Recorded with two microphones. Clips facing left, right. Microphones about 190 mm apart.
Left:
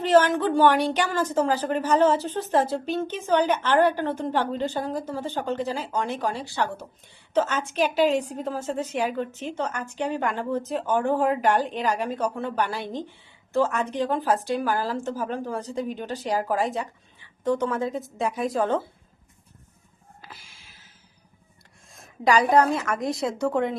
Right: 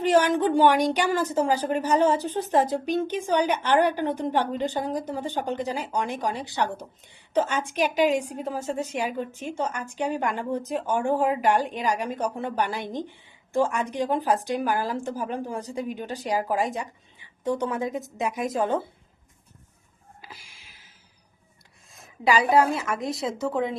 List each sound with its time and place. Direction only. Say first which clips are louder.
0.0 s a woman's voice: left 1 dB; 15° right (ahead or behind)
20.2 s a sound: even; 15° right (ahead or behind)
21.9 s a woman's voice: left 1 dB; 5° right (ahead or behind)